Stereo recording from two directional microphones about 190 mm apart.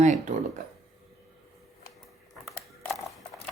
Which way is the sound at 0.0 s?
40° right (ahead or behind).